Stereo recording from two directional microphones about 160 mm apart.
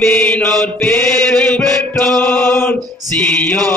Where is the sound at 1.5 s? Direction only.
Centre (ahead or behind).